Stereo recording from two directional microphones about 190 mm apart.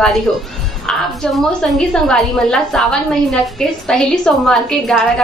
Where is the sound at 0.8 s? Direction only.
Centre (ahead or behind).